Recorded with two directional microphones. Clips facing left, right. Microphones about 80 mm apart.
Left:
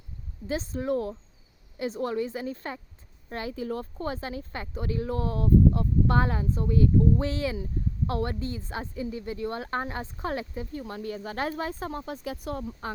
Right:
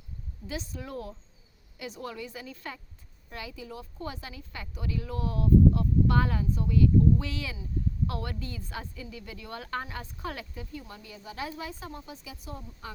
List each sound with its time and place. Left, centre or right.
0.4 s a woman's voice: left